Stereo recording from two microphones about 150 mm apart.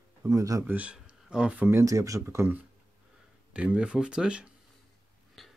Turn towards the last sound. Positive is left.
turn(degrees=0)  # may be behind; listen again after turning